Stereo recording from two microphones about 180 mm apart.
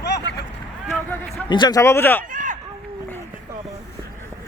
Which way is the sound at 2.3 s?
45° right (ahead or behind).